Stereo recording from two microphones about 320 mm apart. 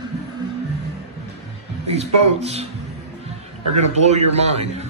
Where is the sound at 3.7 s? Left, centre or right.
Right.